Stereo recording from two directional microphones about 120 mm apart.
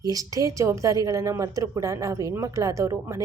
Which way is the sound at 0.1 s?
30° right (ahead or behind).